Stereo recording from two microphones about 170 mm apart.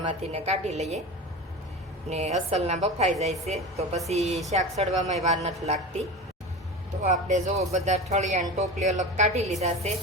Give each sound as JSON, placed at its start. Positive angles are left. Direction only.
{"t": 0.1, "sound": "a woman's voice", "side_deg": -35}
{"t": 2.0, "sound": "a woman's voice", "side_deg": -40}
{"t": 7.0, "sound": "a woman's voice", "side_deg": -45}